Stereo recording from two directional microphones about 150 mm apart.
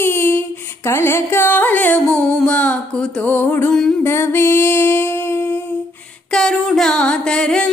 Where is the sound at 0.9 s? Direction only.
15° left (ahead or behind).